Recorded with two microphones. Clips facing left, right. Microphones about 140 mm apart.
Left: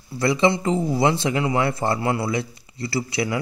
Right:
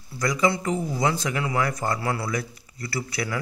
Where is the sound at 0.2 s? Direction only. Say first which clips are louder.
Left 4 dB; 30° left (ahead or behind).